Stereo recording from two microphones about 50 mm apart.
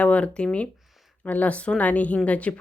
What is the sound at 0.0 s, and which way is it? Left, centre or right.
Speech, left.